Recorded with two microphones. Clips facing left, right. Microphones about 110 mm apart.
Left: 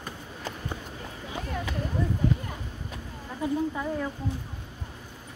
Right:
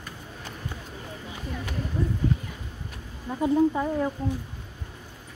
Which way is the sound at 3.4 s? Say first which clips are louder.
Right 6 dB; 20° right (ahead or behind).